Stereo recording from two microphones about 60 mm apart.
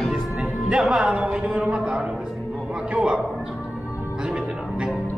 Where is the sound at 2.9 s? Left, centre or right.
Centre.